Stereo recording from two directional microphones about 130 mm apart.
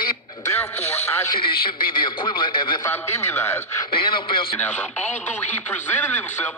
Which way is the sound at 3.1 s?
20° left (ahead or behind).